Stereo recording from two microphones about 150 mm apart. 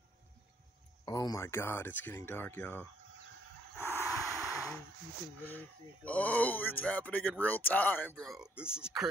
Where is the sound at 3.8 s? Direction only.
15° left (ahead or behind).